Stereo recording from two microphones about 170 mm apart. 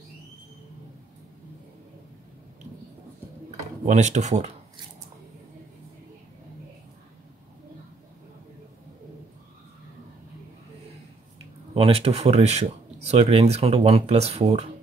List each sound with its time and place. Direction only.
3.8 s speech: 45° right (ahead or behind)
11.7 s speech: 35° right (ahead or behind)